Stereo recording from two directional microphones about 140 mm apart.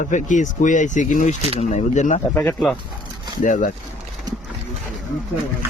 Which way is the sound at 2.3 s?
15° left (ahead or behind).